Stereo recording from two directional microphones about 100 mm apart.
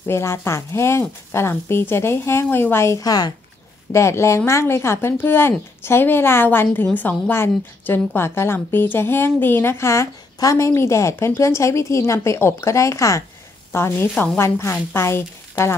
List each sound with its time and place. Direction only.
0.0 s speech: 25° left (ahead or behind)
3.9 s a woman's voice: 30° left (ahead or behind)